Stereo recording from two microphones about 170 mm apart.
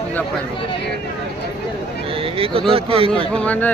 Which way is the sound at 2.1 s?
35° right (ahead or behind).